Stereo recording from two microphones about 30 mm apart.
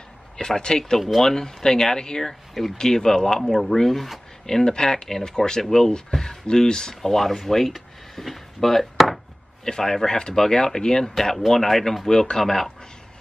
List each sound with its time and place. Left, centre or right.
0.4 s speech: left
3.7 s speech: centre
4.5 s speech: centre
7.0 s speech: centre
8.5 s chopping: centre
8.9 s chopping: centre
9.7 s speech: centre
11.3 s speech: centre
12.1 s speech: left